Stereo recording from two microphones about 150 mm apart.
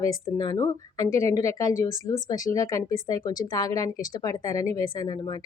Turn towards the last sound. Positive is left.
turn(degrees=25)  # may be behind; listen again after turning